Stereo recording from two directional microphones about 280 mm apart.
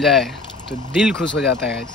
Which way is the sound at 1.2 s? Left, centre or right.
Left.